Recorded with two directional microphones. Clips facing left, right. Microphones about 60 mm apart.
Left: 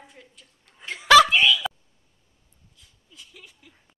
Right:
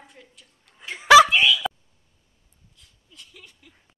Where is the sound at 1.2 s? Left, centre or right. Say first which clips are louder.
Even; centre.